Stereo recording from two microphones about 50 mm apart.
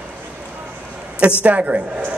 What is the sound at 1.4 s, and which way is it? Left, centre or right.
Speech, right.